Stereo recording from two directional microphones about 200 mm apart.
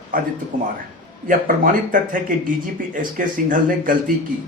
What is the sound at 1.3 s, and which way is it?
Speech, 45° right (ahead or behind).